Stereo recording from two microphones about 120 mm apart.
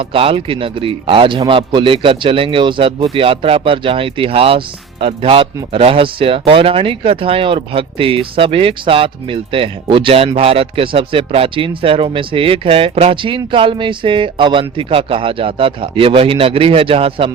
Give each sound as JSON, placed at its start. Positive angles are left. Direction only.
{"t": 0.0, "sound": "speech", "side_deg": -50}